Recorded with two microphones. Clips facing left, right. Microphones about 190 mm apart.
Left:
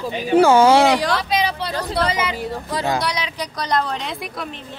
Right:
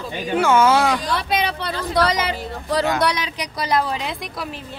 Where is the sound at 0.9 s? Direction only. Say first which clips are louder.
Left 4 dB; 75° left (ahead or behind).